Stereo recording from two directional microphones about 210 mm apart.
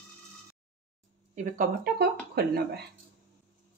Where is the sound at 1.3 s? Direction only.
40° right (ahead or behind).